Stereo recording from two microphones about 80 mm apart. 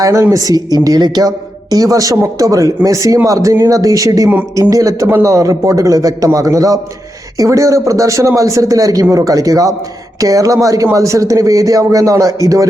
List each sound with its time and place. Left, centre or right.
0.0 s speech: right
1.7 s speech: right